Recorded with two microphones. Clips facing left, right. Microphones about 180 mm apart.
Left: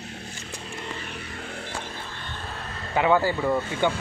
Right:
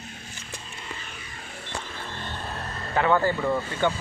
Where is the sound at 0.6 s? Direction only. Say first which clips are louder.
Left 5 dB; 65° left (ahead or behind).